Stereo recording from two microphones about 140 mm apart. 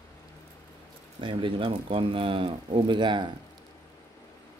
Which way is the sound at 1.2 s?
40° right (ahead or behind).